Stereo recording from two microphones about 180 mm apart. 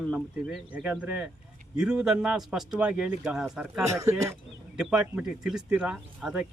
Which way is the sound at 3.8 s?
15° right (ahead or behind).